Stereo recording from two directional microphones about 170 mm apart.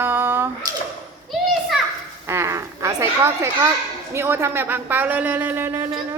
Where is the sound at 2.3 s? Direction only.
15° right (ahead or behind).